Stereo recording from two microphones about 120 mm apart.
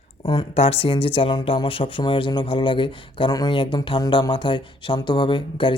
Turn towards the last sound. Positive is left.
turn(degrees=40)  # may be behind; listen again after turning